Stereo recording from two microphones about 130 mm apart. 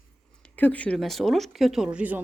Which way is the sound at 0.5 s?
10° left (ahead or behind).